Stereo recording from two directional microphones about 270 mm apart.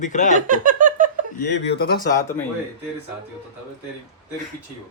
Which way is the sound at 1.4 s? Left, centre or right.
Left.